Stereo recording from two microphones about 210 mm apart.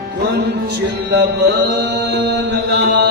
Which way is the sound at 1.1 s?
55° right (ahead or behind).